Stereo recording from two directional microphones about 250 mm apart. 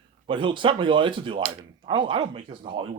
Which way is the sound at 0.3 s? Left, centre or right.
Centre.